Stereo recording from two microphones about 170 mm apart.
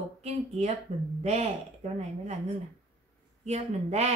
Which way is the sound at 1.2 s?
40° right (ahead or behind).